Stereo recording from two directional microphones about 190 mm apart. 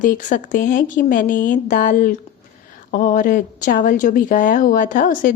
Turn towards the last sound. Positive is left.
turn(degrees=45)  # may be behind; listen again after turning